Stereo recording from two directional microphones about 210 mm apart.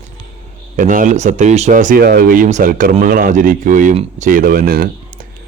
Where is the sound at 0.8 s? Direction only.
40° right (ahead or behind).